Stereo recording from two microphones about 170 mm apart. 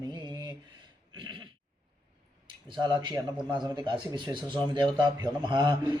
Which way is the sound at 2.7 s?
25° right (ahead or behind).